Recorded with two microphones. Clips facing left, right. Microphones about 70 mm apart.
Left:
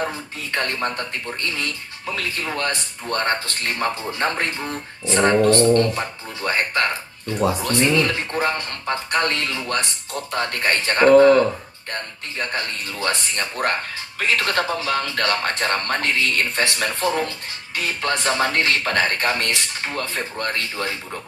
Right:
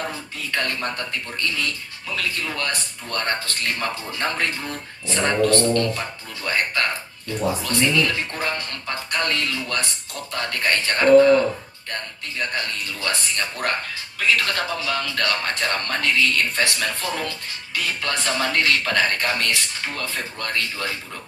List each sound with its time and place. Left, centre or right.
0.1 s speech: left
5.0 s music: left
6.4 s speech: left
12.4 s speech: left